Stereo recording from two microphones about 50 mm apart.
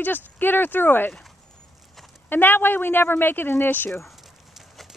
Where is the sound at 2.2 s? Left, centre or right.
Left.